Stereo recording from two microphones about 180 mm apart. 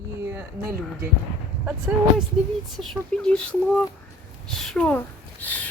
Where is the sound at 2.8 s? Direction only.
5° left (ahead or behind).